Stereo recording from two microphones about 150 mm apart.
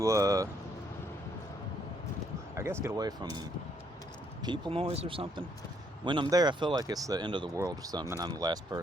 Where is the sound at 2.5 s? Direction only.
15° right (ahead or behind).